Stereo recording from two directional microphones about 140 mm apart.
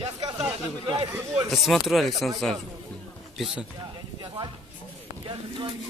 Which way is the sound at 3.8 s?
35° right (ahead or behind).